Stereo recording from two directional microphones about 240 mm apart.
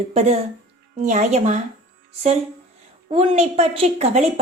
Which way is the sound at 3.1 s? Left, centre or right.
Right.